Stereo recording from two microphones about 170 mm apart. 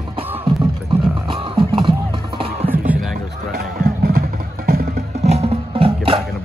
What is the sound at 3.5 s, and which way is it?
Music, 65° right (ahead or behind).